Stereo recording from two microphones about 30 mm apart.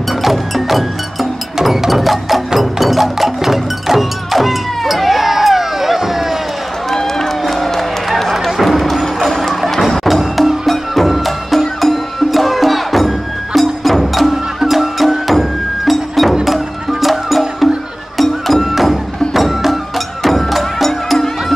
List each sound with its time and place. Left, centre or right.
0.2 s music: centre
1.6 s a sound: centre
1.9 s music: centre
6.9 s run: centre
8.3 s a sound: centre
9.3 s music: centre
20.2 s music: centre